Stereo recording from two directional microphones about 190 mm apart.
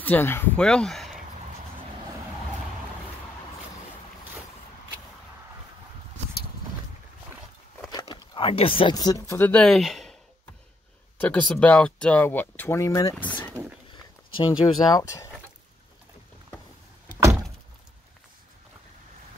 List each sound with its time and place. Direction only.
0.0 s speech: 10° left (ahead or behind)
7.9 s speech: 20° left (ahead or behind); by 10.1 s centre (ahead or behind)
11.1 s speech: 10° left (ahead or behind)
14.6 s speech: 20° left (ahead or behind)